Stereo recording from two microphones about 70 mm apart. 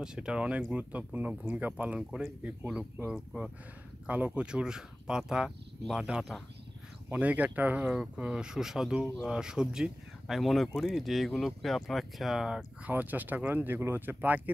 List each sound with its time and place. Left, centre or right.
0.0 s speech: centre
4.4 s speech: centre
7.1 s speech: right; by 12.5 s centre
12.8 s speech: right